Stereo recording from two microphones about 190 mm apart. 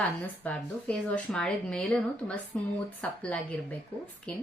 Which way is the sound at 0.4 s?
5° left (ahead or behind).